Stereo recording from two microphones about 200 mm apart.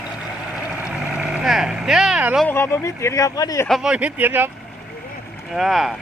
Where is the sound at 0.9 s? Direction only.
5° right (ahead or behind).